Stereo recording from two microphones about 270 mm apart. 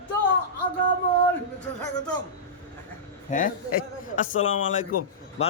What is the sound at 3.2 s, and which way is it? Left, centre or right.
A man's voice, left.